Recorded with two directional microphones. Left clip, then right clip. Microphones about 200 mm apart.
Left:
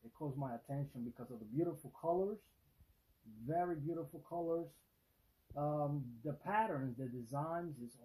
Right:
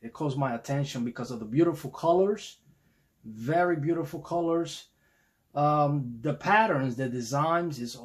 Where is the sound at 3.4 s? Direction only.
15° right (ahead or behind).